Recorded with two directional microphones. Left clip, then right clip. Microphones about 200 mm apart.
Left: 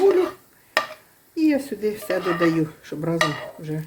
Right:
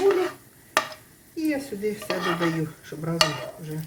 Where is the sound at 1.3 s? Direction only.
45° left (ahead or behind).